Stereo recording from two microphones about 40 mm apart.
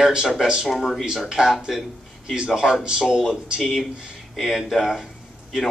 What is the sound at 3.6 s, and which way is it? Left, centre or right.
Speech, centre.